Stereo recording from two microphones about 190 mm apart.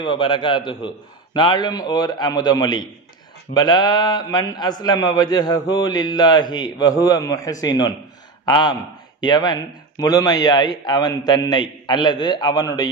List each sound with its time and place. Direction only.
0.0 s a man's voice: 25° left (ahead or behind)